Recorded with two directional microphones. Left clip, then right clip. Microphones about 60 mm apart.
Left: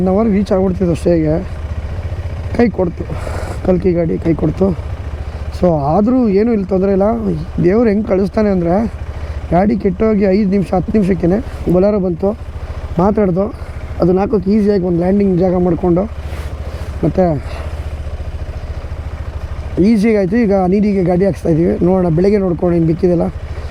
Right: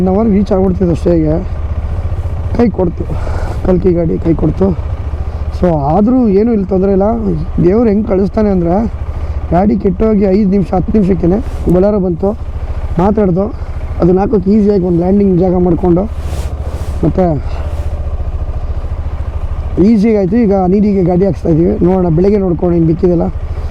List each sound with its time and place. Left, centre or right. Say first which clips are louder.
0.0 s speech: right 2 dB; left
2.5 s speech: right 2 dB; left
17.0 s speech: right 1 dB; left
19.7 s speech: right 2 dB; left